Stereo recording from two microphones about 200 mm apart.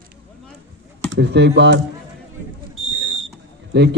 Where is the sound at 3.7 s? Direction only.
60° right (ahead or behind).